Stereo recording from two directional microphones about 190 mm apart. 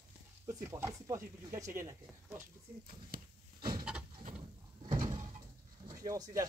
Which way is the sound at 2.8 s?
50° right (ahead or behind).